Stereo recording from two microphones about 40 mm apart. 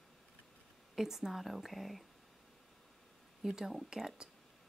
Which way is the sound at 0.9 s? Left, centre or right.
Centre.